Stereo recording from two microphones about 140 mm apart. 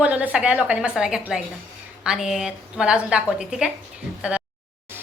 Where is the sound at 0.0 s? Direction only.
10° right (ahead or behind).